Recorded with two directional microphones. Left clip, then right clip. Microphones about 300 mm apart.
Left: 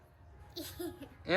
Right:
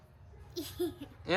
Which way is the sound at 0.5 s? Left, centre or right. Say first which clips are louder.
Right 6 dB; centre.